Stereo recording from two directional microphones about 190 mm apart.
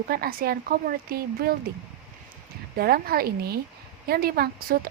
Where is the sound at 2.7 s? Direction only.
55° right (ahead or behind).